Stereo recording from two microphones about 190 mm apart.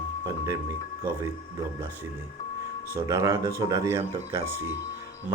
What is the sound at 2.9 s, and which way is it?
Speech, 15° right (ahead or behind).